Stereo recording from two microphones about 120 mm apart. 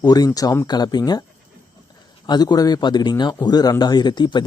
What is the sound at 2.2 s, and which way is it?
Speech, 35° left (ahead or behind).